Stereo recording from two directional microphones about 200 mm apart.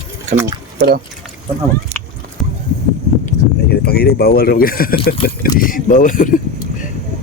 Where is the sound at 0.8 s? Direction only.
50° right (ahead or behind).